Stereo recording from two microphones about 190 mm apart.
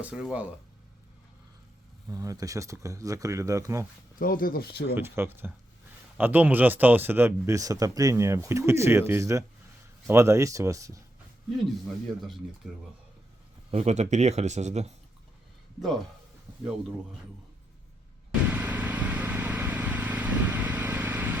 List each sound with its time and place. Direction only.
0.0 s speech: 5° right (ahead or behind)
2.0 s speech: 15° right (ahead or behind)
4.2 s speech: 50° left (ahead or behind)
4.9 s speech: 10° right (ahead or behind)
11.6 s speech: centre (ahead or behind)
13.7 s speech: 35° right (ahead or behind)
18.5 s vehicle: 10° right (ahead or behind)